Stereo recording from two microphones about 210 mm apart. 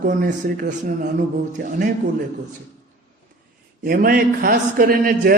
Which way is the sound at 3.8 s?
40° right (ahead or behind).